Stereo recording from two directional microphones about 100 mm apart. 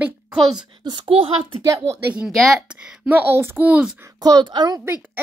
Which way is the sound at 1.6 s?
35° right (ahead or behind).